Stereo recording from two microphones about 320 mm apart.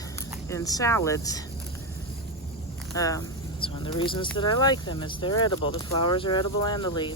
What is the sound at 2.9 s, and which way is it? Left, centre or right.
Speech, centre.